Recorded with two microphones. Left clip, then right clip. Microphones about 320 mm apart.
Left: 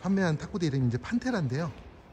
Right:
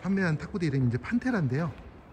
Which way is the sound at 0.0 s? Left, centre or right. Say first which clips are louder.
Left 1 dB; centre.